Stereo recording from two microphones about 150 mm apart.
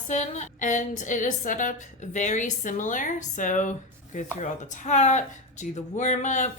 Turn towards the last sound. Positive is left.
turn(degrees=55)  # may be behind; listen again after turning